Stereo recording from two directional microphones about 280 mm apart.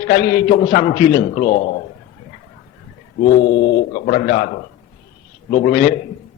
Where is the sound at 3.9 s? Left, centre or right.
Left.